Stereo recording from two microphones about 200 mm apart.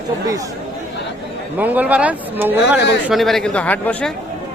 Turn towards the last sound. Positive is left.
turn(degrees=5)  # may be behind; listen again after turning